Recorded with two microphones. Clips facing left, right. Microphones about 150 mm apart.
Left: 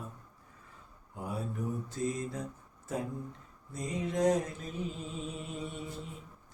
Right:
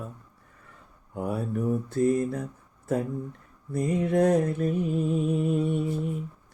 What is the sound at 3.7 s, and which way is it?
Mantra, 60° right (ahead or behind).